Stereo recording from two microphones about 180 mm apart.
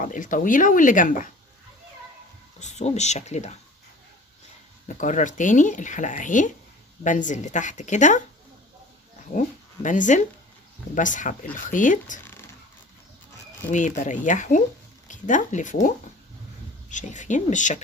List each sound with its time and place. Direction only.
0.0 s speech: 45° left (ahead or behind)
2.6 s speech: 40° left (ahead or behind)
4.9 s speech: 45° left (ahead or behind)
9.8 s speech: 45° left (ahead or behind)
12.2 s a sound: 10° left (ahead or behind)
13.7 s speech: 45° left (ahead or behind)
16.9 s speech: 45° left (ahead or behind)